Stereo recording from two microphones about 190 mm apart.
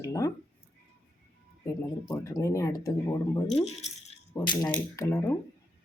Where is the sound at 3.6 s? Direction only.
35° left (ahead or behind).